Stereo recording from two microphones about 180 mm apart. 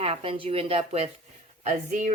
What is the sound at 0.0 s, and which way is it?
A woman's voice, 30° right (ahead or behind).